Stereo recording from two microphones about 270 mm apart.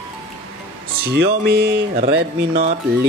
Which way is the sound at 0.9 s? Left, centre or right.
Right.